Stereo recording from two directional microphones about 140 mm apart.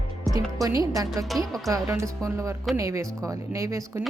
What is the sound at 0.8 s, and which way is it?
Speech, 25° right (ahead or behind).